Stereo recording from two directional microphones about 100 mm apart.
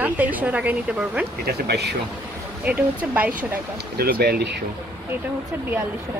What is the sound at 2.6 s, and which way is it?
Speech, 15° right (ahead or behind).